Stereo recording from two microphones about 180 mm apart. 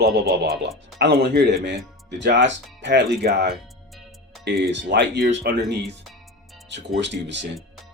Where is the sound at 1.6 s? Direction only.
75° right (ahead or behind).